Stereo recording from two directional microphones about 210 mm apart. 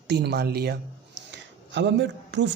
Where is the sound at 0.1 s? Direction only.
50° right (ahead or behind).